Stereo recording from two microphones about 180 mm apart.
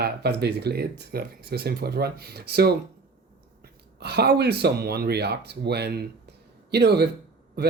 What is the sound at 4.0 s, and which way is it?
Speech, 65° right (ahead or behind).